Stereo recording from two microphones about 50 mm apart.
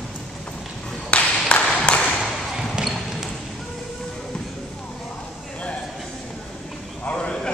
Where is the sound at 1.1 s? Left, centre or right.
Left.